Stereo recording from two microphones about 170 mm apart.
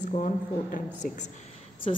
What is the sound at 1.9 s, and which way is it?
Speech, 35° left (ahead or behind).